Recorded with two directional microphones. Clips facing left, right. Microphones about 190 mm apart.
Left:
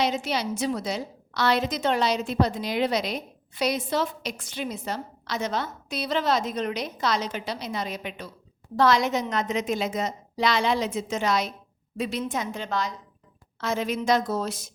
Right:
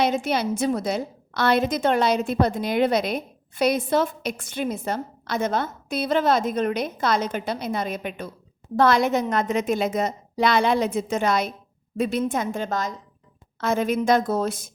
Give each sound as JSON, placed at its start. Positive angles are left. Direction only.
{"t": 0.0, "sound": "a woman's voice", "side_deg": -50}